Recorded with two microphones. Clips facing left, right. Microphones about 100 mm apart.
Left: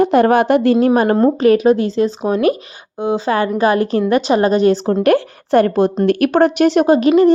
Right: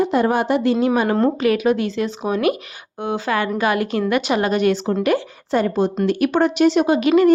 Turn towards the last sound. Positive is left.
turn(degrees=35)  # may be behind; listen again after turning